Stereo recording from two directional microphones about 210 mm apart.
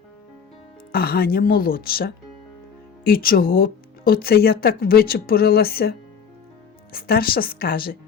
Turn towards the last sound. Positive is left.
turn(degrees=45)  # may be behind; listen again after turning